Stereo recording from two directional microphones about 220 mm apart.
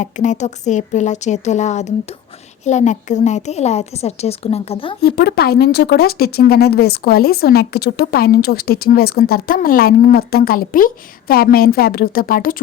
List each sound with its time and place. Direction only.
0.0 s a woman's voice: 35° left (ahead or behind)
5.0 s speech: 45° left (ahead or behind)